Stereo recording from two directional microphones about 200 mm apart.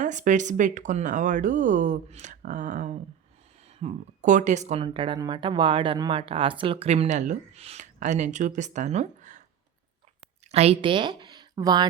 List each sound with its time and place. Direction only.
0.0 s speech: 40° right (ahead or behind)
10.5 s a woman's voice: 30° right (ahead or behind)